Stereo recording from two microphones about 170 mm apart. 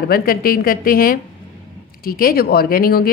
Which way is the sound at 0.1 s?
60° left (ahead or behind).